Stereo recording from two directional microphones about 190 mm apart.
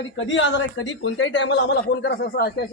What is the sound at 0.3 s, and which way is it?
Speech, 75° left (ahead or behind).